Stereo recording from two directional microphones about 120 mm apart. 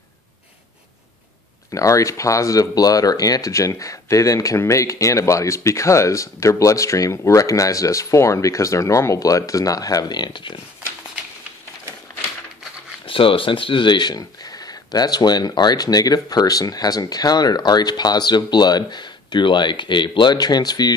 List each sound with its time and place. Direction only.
1.7 s speech: 25° left (ahead or behind); by 10.6 s 45° left (ahead or behind)
13.0 s speech: 50° left (ahead or behind)